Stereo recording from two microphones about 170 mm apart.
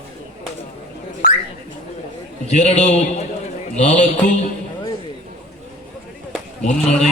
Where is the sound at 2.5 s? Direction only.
40° left (ahead or behind).